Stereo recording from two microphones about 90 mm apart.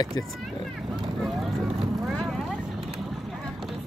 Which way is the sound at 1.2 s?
Centre (ahead or behind).